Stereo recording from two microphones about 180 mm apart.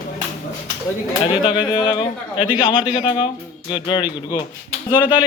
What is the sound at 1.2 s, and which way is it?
Speech, 30° left (ahead or behind).